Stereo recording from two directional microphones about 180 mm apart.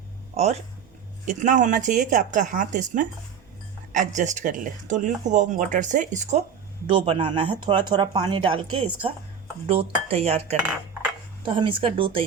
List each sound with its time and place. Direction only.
0.4 s speech: 35° right (ahead or behind)
6.8 s speech: 30° right (ahead or behind)
10.1 s cutlery: 35° right (ahead or behind)
11.4 s speech: 30° right (ahead or behind)